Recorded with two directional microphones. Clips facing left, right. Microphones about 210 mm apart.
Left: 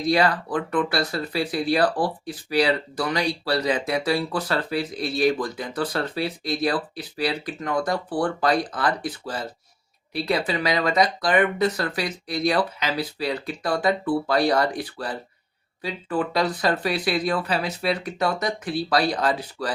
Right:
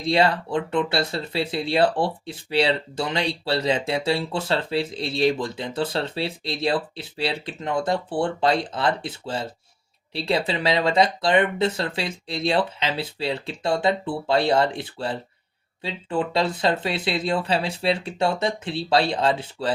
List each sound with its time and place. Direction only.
0.0 s speech: 25° right (ahead or behind)